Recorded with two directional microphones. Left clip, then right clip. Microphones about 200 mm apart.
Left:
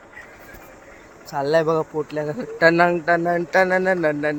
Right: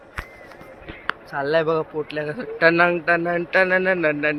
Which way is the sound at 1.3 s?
50° left (ahead or behind).